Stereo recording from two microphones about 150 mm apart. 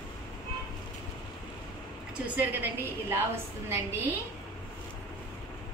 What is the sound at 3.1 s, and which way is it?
Speech, 15° right (ahead or behind).